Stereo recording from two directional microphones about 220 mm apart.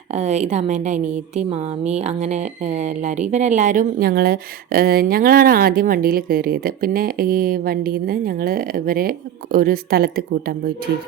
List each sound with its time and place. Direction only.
0.1 s speech: 30° right (ahead or behind)